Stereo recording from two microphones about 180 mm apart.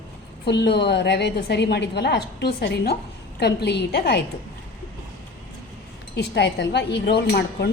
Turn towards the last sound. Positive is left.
turn(degrees=65)  # may be behind; listen again after turning